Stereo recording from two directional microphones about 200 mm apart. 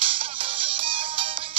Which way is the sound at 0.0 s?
25° right (ahead or behind).